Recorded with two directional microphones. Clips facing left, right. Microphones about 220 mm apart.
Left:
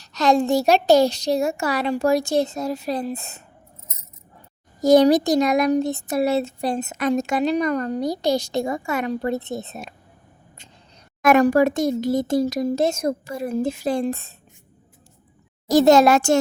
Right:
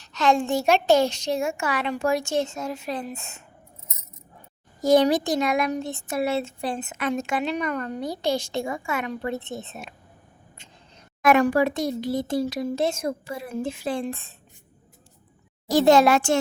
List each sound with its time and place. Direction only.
0.0 s speech: 40° left (ahead or behind)
4.8 s speech: 40° left (ahead or behind)
11.2 s speech: 40° left (ahead or behind)
15.7 s a child's voice: 40° left (ahead or behind)